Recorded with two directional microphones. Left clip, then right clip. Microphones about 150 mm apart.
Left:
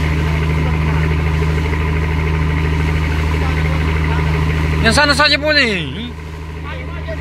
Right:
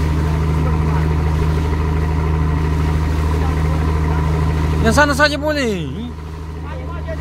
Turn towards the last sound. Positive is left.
turn(degrees=-20)  # may be behind; listen again after turning